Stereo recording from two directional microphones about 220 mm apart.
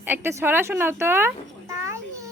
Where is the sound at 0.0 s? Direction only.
10° right (ahead or behind).